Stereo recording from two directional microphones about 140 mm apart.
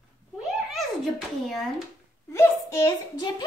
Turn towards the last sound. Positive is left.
turn(degrees=25)  # may be behind; listen again after turning